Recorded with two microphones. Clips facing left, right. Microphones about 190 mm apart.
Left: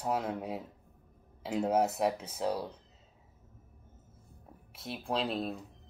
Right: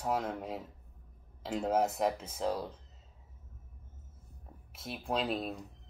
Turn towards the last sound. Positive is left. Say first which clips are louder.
# left 1 dB
turn(degrees=0)  # may be behind; listen again after turning